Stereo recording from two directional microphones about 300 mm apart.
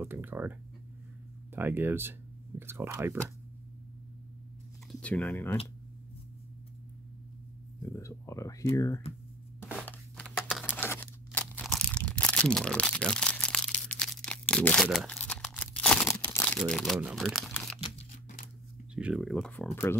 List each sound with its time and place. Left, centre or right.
0.0 s speech: centre
5.0 s speech: centre
7.8 s speech: centre
9.7 s tearing: centre
17.8 s tearing: left
18.9 s speech: centre